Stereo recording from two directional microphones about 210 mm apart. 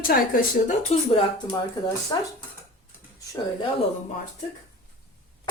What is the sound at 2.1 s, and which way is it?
Speech, 15° left (ahead or behind).